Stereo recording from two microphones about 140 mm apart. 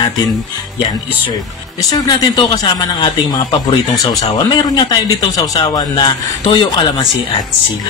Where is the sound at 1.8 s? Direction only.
30° left (ahead or behind).